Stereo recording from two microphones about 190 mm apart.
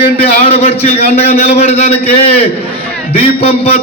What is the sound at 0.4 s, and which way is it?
A man's voice, 30° left (ahead or behind).